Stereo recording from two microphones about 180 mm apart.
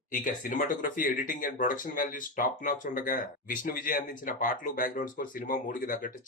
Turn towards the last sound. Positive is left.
turn(degrees=50)  # may be behind; listen again after turning